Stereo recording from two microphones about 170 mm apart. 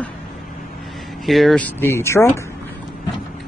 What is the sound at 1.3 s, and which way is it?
Speech, centre (ahead or behind).